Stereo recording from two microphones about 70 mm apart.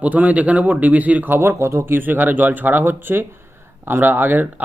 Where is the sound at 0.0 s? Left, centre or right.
Right.